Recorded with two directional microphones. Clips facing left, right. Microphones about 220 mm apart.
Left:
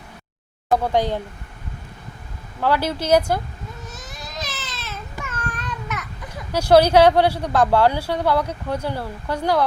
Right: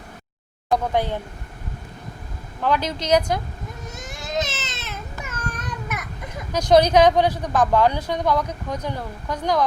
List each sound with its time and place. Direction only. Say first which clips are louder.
0.7 s a woman's voice: left 2 dB; 15° left (ahead or behind)
2.6 s a woman's voice: left 2 dB; 10° left (ahead or behind)
4.3 s baby cry: right 8 dB; 25° right (ahead or behind)
5.5 s babbling: even; 20° right (ahead or behind)
6.5 s a woman's voice: left 2 dB; 10° left (ahead or behind)